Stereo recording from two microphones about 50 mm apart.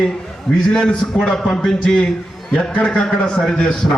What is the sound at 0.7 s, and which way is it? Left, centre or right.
A man's voice, centre.